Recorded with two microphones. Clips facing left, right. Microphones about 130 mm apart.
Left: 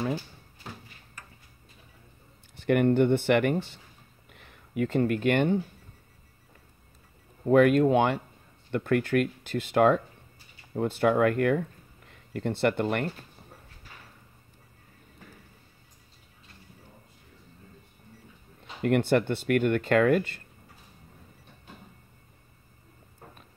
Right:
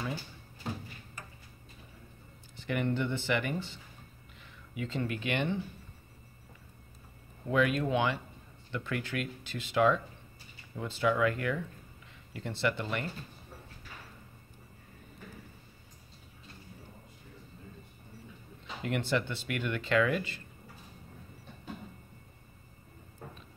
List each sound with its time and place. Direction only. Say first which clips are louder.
2.6 s speech: left 10 dB; 55° left (ahead or behind)
7.4 s speech: left 9 dB; 50° left (ahead or behind)
18.8 s speech: left 8 dB; 55° left (ahead or behind)